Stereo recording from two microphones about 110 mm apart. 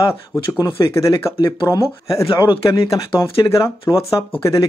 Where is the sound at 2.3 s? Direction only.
40° left (ahead or behind).